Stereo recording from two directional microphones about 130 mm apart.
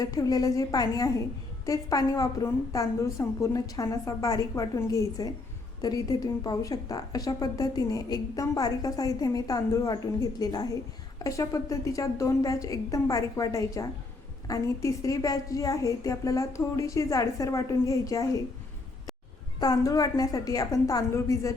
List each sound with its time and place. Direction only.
0.0 s a woman's voice: 25° left (ahead or behind)
19.5 s a woman's voice: 30° left (ahead or behind)